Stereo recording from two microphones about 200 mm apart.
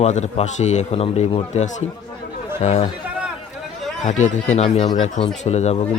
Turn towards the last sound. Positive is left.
turn(degrees=35)  # may be behind; listen again after turning